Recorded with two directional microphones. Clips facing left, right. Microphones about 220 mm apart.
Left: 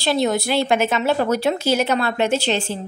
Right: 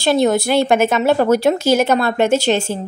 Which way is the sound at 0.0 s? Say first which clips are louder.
Right 5 dB; 50° right (ahead or behind).